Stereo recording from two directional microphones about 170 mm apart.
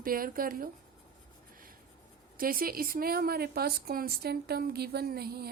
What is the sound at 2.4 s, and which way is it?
Speech, 55° right (ahead or behind).